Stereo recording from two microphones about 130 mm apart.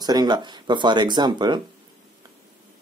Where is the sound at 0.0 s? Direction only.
30° right (ahead or behind).